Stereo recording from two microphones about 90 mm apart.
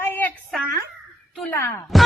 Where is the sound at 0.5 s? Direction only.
Centre (ahead or behind).